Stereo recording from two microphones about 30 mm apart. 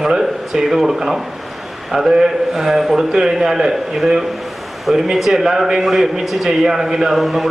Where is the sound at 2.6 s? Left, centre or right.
Centre.